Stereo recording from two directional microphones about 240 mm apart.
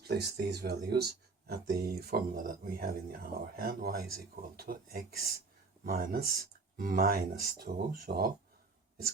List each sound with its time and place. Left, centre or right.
0.1 s speech: right